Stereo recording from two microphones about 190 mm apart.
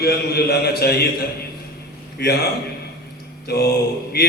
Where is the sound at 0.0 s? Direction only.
55° left (ahead or behind).